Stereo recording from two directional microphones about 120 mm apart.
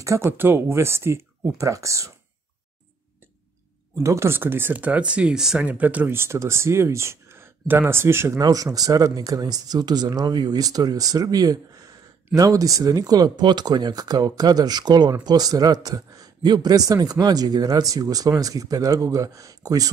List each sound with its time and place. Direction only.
0.3 s speech: 15° right (ahead or behind)
4.0 s a man's voice: 25° right (ahead or behind)